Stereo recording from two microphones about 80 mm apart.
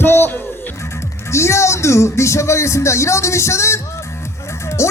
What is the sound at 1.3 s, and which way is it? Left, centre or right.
Speech, left.